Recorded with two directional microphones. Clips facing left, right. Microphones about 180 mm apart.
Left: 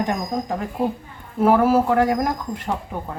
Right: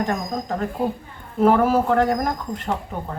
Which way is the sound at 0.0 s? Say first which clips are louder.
Left 1 dB; 15° left (ahead or behind).